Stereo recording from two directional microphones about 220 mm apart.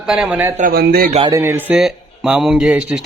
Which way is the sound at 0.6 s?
45° right (ahead or behind).